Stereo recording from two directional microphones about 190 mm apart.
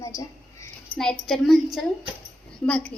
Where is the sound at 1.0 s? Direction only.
5° left (ahead or behind).